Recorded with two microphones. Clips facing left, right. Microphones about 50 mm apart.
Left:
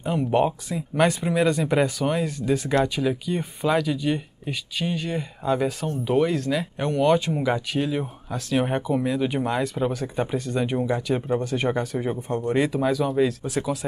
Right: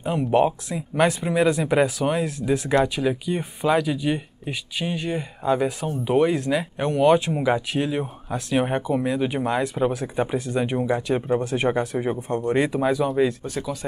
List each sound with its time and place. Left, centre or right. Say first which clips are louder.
0.0 s speech: right 2 dB; centre
13.6 s speech: left 4 dB; left